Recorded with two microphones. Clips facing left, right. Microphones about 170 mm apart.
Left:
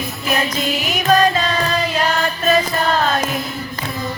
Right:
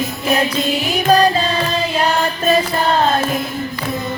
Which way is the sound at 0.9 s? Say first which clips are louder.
Right 2 dB; 35° right (ahead or behind).